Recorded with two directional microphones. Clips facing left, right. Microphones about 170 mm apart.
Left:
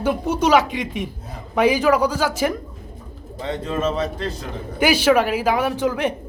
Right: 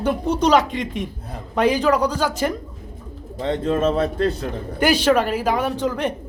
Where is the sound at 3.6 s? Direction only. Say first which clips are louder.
Right 3 dB; 50° right (ahead or behind).